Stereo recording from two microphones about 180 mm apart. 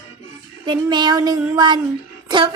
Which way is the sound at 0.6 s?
25° right (ahead or behind).